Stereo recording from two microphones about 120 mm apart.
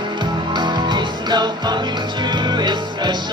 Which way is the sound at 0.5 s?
35° right (ahead or behind).